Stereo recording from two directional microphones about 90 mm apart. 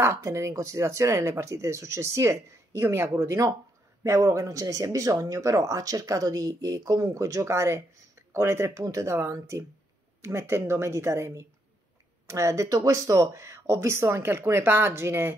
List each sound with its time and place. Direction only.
0.0 s speech: 35° right (ahead or behind)